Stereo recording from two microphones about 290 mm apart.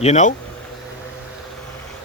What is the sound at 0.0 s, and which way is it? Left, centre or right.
Speech, left.